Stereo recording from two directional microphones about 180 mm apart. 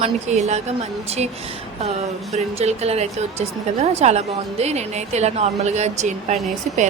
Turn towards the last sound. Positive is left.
turn(degrees=-40)  # may be behind; listen again after turning